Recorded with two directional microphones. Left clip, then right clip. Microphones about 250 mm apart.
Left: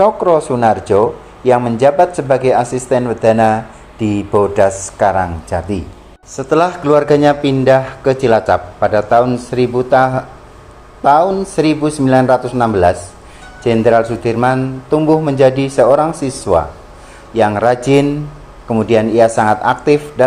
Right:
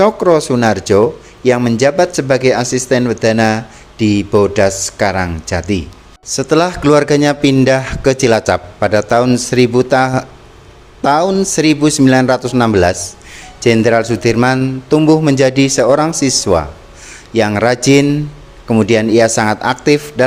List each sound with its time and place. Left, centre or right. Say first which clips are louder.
0.0 s a man's voice: even; right
4.9 s a man's voice: left 2 dB; right